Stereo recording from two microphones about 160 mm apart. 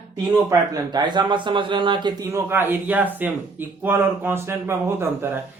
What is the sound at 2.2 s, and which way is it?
Speech, 20° right (ahead or behind).